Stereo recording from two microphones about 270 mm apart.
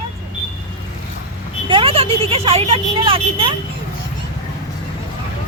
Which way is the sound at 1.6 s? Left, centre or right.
Centre.